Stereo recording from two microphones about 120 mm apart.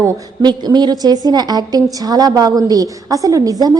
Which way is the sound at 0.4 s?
35° right (ahead or behind).